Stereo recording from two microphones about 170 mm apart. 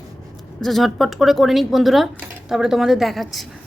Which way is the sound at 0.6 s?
Centre (ahead or behind).